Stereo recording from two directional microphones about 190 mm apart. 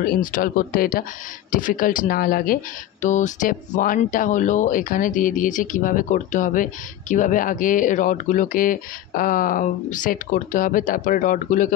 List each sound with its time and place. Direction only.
0.0 s speech: 45° left (ahead or behind)